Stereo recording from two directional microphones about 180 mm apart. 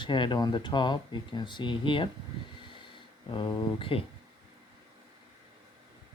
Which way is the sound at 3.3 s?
25° left (ahead or behind).